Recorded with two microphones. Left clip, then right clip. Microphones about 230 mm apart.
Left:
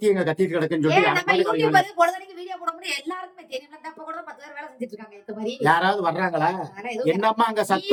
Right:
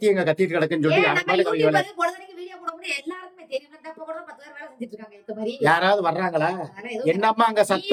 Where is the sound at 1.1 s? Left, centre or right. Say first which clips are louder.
Even; left.